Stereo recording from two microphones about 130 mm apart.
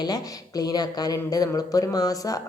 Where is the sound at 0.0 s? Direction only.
30° left (ahead or behind).